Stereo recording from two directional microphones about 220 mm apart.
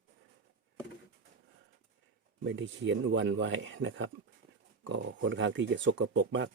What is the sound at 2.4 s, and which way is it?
Speech, 55° right (ahead or behind).